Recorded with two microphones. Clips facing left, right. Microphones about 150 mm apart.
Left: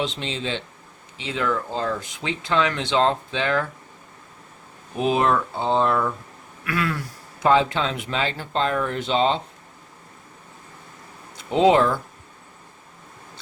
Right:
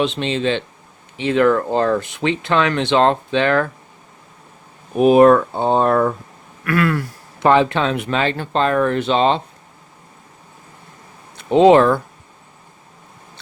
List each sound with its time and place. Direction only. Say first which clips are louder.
0.0 s speech: right 8 dB; 70° right (ahead or behind)
4.9 s speech: right 10 dB; 50° right (ahead or behind); by 9.4 s 70° right (ahead or behind)
11.3 s speech: right 6 dB; 65° right (ahead or behind)